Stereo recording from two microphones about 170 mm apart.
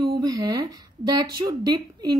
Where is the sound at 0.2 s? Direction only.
25° right (ahead or behind).